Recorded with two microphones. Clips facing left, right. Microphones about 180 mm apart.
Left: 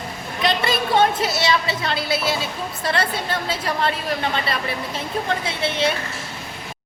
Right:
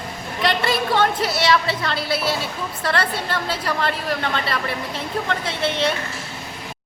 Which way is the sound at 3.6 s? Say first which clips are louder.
Even; 20° left (ahead or behind).